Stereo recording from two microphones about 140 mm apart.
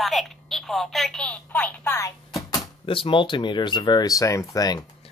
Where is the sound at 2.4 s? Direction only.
40° left (ahead or behind).